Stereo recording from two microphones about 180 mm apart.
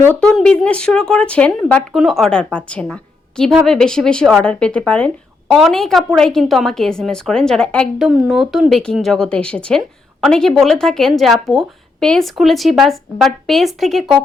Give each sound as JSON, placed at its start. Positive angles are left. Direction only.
{"t": 0.0, "sound": "a woman's voice", "side_deg": 5}